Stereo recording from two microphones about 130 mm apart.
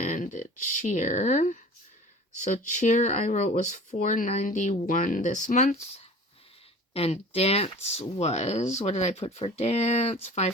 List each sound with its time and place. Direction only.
0.0 s speech: 75° left (ahead or behind)
6.9 s speech: 50° left (ahead or behind)